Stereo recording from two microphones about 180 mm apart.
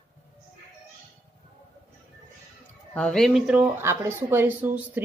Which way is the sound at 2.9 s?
5° left (ahead or behind).